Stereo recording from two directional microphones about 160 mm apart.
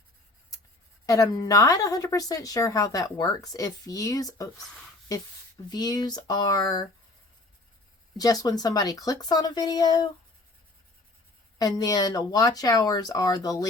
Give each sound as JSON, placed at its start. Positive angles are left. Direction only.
{"t": 1.0, "sound": "a woman's voice", "side_deg": 20}
{"t": 5.6, "sound": "a woman's voice", "side_deg": 25}
{"t": 8.1, "sound": "a woman's voice", "side_deg": 25}
{"t": 11.5, "sound": "a woman's voice", "side_deg": 25}